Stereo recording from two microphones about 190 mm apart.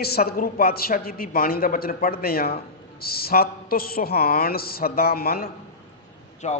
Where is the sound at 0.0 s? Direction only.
55° left (ahead or behind).